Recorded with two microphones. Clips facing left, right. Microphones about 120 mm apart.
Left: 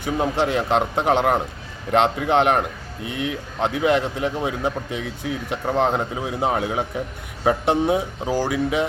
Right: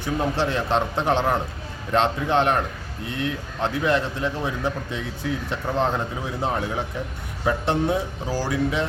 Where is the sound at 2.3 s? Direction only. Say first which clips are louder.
Left 3 dB; 15° left (ahead or behind).